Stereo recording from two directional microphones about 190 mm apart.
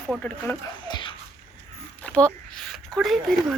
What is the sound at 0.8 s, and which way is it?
Sneeze, 25° left (ahead or behind).